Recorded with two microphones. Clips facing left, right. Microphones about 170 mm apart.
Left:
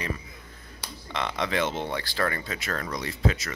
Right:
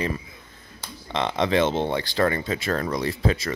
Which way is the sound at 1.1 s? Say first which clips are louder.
Right 6 dB; 25° right (ahead or behind).